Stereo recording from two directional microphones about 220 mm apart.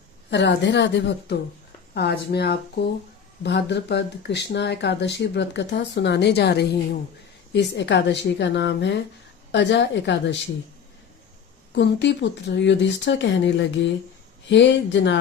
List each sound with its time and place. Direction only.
0.3 s a woman's voice: 55° left (ahead or behind)
11.7 s a woman's voice: 55° left (ahead or behind)